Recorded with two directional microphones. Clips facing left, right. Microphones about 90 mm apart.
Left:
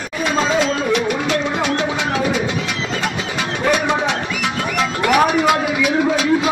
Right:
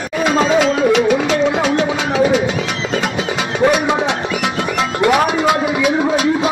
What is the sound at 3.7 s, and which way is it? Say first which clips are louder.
Music: right 2 dB; 20° right (ahead or behind).